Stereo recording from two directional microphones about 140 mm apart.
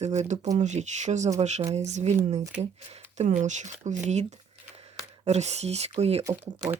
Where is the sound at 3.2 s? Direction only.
60° right (ahead or behind).